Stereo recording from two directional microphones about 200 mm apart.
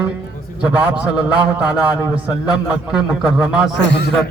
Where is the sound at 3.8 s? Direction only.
60° left (ahead or behind).